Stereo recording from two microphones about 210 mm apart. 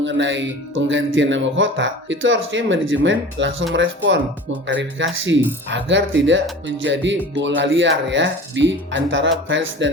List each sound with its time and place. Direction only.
0.0 s speech: 60° right (ahead or behind)